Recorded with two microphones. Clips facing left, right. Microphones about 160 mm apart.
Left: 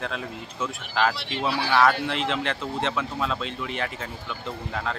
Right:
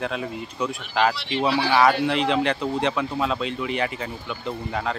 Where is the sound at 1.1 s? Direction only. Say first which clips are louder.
Right 5 dB; 50° left (ahead or behind).